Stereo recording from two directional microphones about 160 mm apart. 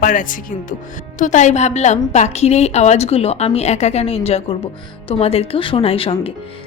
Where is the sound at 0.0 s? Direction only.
55° left (ahead or behind).